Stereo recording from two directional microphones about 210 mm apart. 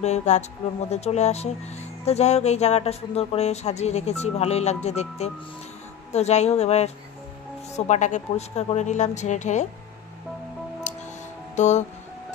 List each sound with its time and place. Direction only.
0.0 s speech: 35° left (ahead or behind)
10.9 s music: 30° left (ahead or behind)
11.5 s speech: 35° left (ahead or behind)